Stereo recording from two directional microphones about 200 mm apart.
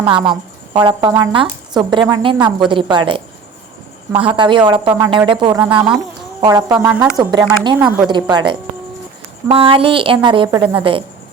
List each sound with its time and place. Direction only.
0.0 s speech: 25° right (ahead or behind)
5.6 s a woman's voice: 5° right (ahead or behind)
6.4 s speech: 20° right (ahead or behind)
6.7 s a woman's voice: 10° right (ahead or behind)
7.2 s speech: 20° right (ahead or behind)